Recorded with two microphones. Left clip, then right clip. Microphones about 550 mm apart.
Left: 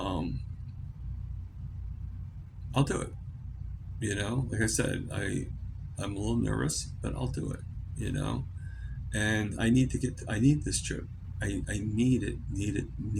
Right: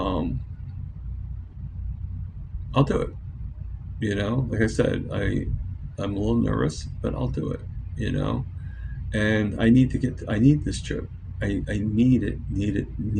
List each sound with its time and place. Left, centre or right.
2.7 s speech: left